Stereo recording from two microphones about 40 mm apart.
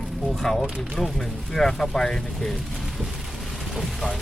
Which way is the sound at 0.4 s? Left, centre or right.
Centre.